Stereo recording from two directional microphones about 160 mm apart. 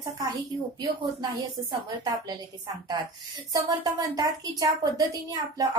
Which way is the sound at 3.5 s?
25° right (ahead or behind).